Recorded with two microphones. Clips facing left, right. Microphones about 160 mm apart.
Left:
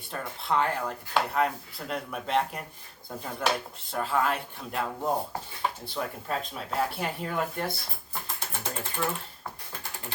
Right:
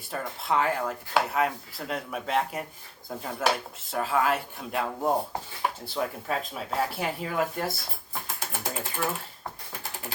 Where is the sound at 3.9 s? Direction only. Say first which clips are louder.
Right 2 dB; 5° right (ahead or behind).